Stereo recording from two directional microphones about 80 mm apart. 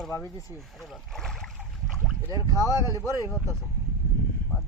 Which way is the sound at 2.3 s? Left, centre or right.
Left.